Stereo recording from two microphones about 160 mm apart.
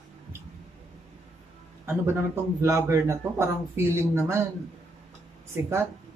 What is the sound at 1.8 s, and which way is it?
A man's voice, 15° right (ahead or behind).